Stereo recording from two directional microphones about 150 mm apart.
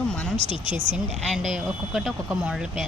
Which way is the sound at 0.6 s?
55° right (ahead or behind).